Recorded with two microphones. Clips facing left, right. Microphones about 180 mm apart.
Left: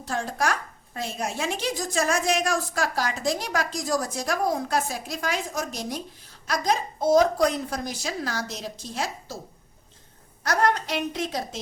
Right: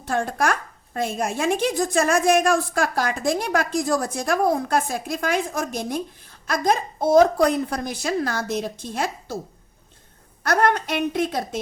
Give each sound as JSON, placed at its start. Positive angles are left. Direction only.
{"t": 0.0, "sound": "a woman's voice", "side_deg": -55}
{"t": 10.4, "sound": "a woman's voice", "side_deg": -55}